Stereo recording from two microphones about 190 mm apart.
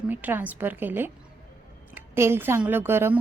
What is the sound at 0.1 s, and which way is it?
A woman's voice, 10° right (ahead or behind).